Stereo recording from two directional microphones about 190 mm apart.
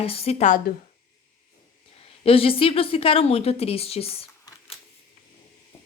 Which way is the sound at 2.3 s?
30° left (ahead or behind).